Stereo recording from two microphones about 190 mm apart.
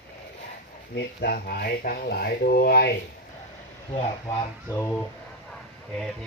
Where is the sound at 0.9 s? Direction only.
55° left (ahead or behind).